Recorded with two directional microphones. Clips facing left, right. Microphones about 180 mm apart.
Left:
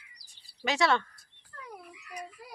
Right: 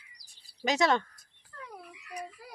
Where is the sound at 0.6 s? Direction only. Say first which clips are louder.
Right 1 dB; 40° right (ahead or behind).